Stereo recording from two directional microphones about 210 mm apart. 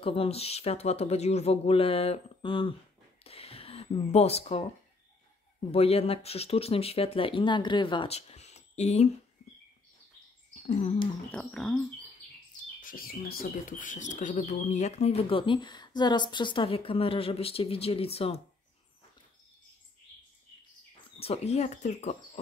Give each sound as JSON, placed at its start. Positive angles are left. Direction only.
{"t": 0.0, "sound": "speech", "side_deg": 25}
{"t": 3.3, "sound": "a sound", "side_deg": 25}
{"t": 5.6, "sound": "speech", "side_deg": 30}
{"t": 10.5, "sound": "a sound", "side_deg": 30}
{"t": 11.3, "sound": "speech", "side_deg": 5}
{"t": 12.8, "sound": "speech", "side_deg": 45}
{"t": 21.2, "sound": "speech", "side_deg": 30}